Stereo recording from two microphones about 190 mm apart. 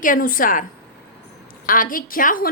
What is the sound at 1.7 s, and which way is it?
Speech, 45° left (ahead or behind).